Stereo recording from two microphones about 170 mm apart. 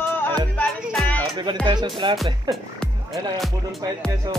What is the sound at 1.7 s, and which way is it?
Speech, 25° right (ahead or behind).